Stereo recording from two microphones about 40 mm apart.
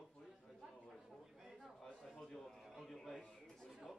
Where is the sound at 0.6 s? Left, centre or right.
Centre.